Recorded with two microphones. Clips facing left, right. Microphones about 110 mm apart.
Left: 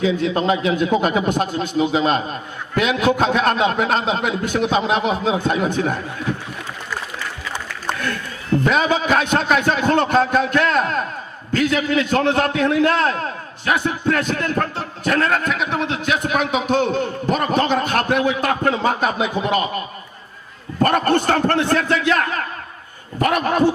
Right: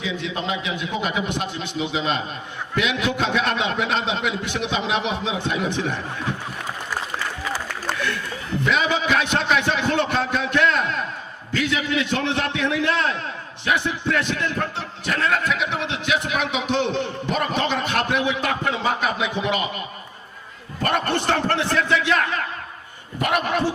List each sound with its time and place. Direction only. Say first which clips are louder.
0.0 s a man's voice: left 9 dB; 45° left (ahead or behind)
8.6 s a man's voice: left 2 dB; 45° left (ahead or behind)
20.7 s a man's voice: left 6 dB; 45° left (ahead or behind)